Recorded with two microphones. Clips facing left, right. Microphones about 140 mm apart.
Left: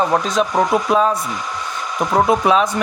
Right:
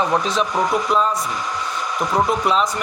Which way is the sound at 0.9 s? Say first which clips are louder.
Left 3 dB; 55° left (ahead or behind).